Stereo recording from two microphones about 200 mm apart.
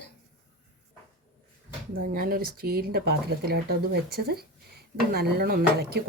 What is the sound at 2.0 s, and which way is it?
Speech, 45° right (ahead or behind).